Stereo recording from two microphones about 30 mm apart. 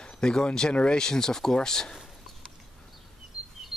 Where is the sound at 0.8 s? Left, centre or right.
Left.